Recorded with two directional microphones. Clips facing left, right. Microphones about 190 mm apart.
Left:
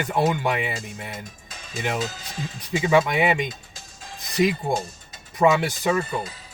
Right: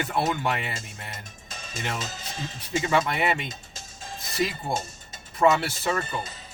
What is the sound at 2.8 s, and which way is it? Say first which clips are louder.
Speech: left 5 dB; 15° left (ahead or behind).